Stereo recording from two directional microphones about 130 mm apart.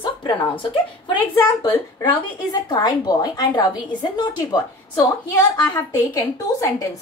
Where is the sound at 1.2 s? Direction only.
20° left (ahead or behind).